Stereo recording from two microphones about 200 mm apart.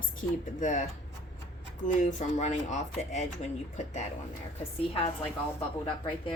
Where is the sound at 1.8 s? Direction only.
35° left (ahead or behind).